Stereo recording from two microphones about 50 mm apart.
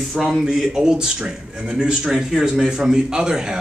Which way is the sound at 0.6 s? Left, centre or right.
Centre.